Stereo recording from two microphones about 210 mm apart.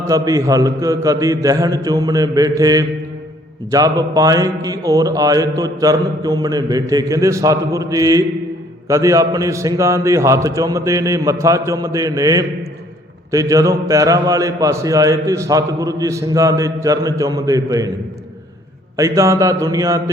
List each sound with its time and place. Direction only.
0.1 s a man's voice: 15° right (ahead or behind)
18.9 s a man's voice: 15° right (ahead or behind)